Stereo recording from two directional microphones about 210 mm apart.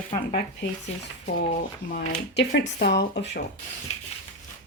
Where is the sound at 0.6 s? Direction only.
60° left (ahead or behind).